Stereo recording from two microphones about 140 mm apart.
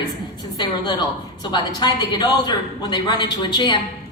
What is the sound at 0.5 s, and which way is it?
A woman's voice, 30° left (ahead or behind).